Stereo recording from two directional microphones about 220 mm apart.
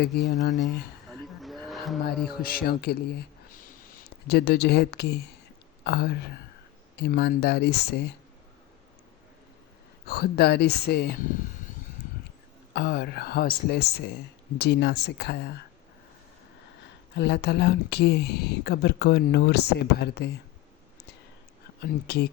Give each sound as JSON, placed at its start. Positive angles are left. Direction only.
{"t": 1.4, "sound": "music", "side_deg": 0}
{"t": 2.2, "sound": "speech", "side_deg": 40}
{"t": 10.1, "sound": "speech", "side_deg": 45}
{"t": 12.7, "sound": "speech", "side_deg": 50}
{"t": 17.2, "sound": "speech", "side_deg": 50}
{"t": 21.8, "sound": "speech", "side_deg": 45}